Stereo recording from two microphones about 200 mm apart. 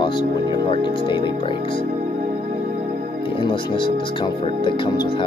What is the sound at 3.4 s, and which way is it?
Speech, 25° left (ahead or behind).